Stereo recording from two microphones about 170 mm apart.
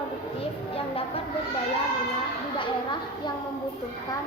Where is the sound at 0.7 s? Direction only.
35° left (ahead or behind).